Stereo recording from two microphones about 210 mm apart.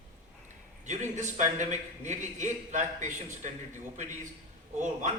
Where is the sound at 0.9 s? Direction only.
35° right (ahead or behind).